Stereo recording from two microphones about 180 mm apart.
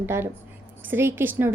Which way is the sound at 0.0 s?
15° right (ahead or behind).